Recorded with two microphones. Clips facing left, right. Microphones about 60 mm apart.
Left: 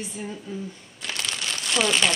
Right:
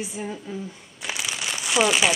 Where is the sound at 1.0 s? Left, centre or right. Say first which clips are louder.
Right 1 dB; centre.